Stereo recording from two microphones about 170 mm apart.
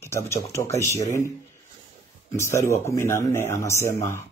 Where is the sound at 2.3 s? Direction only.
15° left (ahead or behind).